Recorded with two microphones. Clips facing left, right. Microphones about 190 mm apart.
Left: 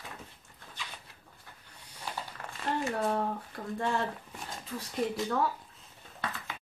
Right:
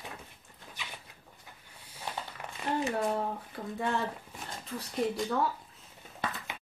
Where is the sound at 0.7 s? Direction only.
15° right (ahead or behind).